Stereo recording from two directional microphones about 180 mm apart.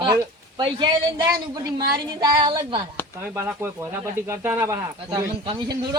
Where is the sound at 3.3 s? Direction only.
10° right (ahead or behind).